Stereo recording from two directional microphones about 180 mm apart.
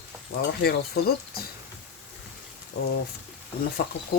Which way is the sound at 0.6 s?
60° left (ahead or behind).